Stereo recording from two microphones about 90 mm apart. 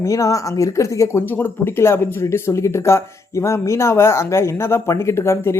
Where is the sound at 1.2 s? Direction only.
20° left (ahead or behind).